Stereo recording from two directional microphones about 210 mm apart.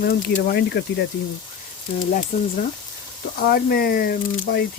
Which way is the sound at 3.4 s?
45° left (ahead or behind).